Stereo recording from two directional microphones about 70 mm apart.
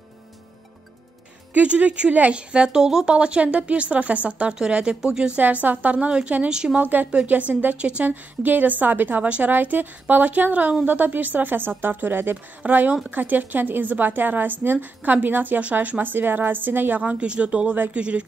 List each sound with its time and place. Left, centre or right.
1.5 s speech: right
5.4 s speech: right
6.8 s speech: right